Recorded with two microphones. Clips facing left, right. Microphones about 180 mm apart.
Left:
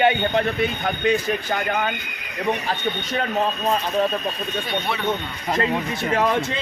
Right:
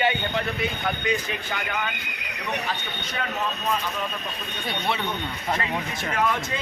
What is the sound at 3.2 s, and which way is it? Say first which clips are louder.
Speech: left 4 dB; 35° left (ahead or behind).